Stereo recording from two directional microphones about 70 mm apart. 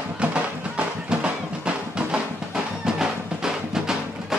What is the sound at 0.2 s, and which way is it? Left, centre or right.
Music, centre.